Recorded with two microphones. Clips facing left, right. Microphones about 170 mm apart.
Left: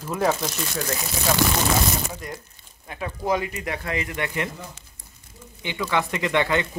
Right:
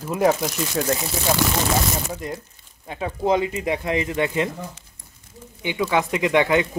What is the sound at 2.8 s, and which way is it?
Speech, 20° right (ahead or behind).